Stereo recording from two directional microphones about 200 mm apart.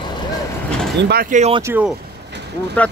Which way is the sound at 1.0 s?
50° right (ahead or behind).